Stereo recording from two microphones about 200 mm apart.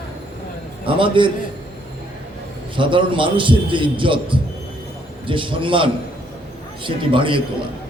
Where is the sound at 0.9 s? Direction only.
25° right (ahead or behind).